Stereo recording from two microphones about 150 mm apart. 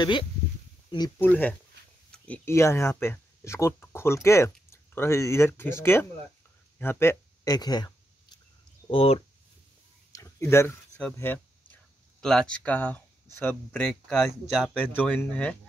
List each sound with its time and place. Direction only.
0.0 s speech: 30° left (ahead or behind)
1.2 s speech: 10° left (ahead or behind); by 7.9 s 25° left (ahead or behind)
8.8 s speech: 40° left (ahead or behind)
10.1 s a sound: 20° left (ahead or behind)
10.5 s speech: 15° left (ahead or behind)
14.9 s speech: 10° left (ahead or behind)